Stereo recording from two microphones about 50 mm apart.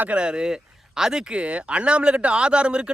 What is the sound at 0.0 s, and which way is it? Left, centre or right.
Speech, right.